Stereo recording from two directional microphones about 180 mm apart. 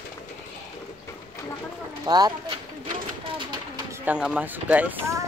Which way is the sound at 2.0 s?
20° right (ahead or behind).